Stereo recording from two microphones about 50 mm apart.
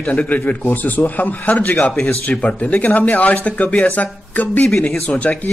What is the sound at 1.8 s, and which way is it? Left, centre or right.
A man's voice, left.